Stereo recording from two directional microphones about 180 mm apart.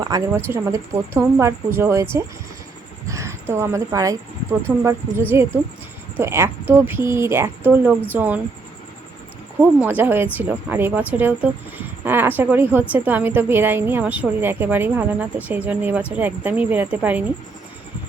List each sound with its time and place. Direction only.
0.0 s a woman's voice: 15° right (ahead or behind)
3.1 s a woman's voice: 15° right (ahead or behind)
9.6 s a woman's voice: 10° right (ahead or behind)